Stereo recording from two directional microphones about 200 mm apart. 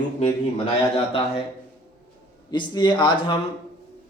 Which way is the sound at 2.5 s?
25° left (ahead or behind).